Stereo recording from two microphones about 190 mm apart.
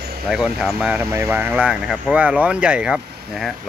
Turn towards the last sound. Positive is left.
turn(degrees=-5)  # may be behind; listen again after turning